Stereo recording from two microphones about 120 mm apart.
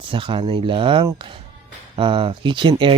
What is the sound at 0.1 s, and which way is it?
Speech, 45° right (ahead or behind).